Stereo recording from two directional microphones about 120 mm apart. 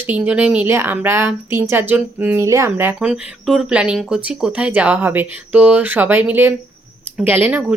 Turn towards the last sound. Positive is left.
turn(degrees=-15)  # may be behind; listen again after turning